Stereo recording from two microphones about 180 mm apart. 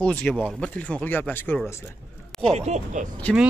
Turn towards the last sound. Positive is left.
turn(degrees=5)  # may be behind; listen again after turning